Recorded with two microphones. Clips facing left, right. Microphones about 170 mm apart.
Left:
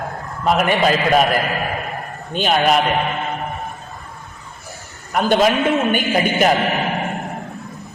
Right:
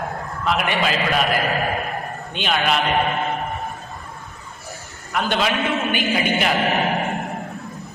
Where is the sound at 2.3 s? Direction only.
40° left (ahead or behind).